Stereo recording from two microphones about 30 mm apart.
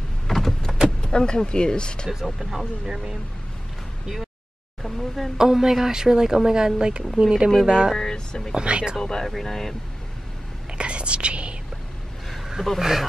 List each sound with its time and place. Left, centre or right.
0.3 s power windows: centre
0.8 s speech: left
2.0 s speech: centre
4.9 s a sound: centre
5.4 s speech: centre
8.1 s speech: left
8.5 s speech: right
9.0 s speech: left
10.8 s whispering: right
12.7 s speech: centre